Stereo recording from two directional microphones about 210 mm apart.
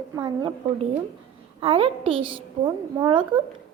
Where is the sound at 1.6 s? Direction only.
25° right (ahead or behind).